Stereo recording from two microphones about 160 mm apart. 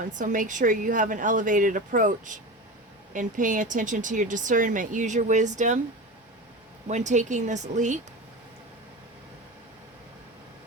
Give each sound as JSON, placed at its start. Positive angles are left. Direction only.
{"t": 0.0, "sound": "speech", "side_deg": -50}
{"t": 6.8, "sound": "speech", "side_deg": -45}